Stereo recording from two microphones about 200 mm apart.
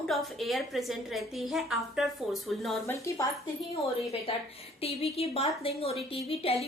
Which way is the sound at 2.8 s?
15° left (ahead or behind).